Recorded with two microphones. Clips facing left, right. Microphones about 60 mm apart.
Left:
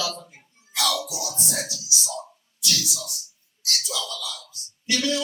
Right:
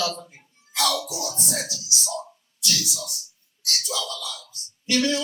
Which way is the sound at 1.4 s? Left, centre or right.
Right.